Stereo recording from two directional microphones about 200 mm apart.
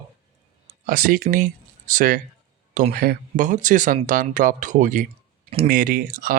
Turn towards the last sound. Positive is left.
turn(degrees=-40)  # may be behind; listen again after turning